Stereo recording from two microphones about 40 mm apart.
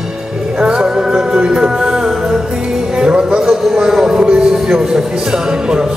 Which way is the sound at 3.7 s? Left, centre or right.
Centre.